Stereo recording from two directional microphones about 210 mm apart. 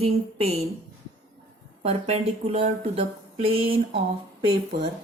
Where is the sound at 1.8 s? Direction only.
30° right (ahead or behind).